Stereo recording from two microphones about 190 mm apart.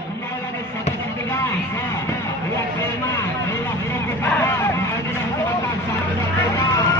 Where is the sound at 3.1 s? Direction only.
15° left (ahead or behind).